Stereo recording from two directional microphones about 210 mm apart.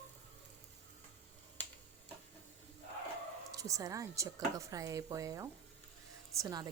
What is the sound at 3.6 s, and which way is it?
Speech, 15° right (ahead or behind).